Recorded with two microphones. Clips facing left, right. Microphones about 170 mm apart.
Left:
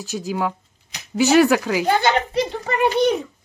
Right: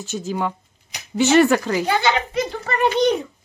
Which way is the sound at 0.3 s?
Centre (ahead or behind).